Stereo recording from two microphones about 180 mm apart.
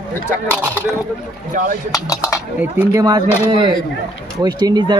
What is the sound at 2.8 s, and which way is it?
Speech, 20° right (ahead or behind).